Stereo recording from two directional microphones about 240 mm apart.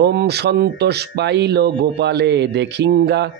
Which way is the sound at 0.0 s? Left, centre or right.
Right.